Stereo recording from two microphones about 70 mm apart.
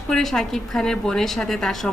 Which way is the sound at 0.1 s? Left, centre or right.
Centre.